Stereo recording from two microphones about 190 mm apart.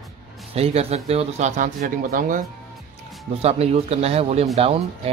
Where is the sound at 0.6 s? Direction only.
35° right (ahead or behind).